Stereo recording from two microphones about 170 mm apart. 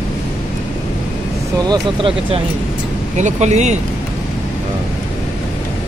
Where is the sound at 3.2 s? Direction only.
45° right (ahead or behind).